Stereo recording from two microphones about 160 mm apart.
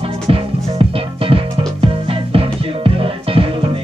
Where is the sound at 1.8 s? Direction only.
35° right (ahead or behind).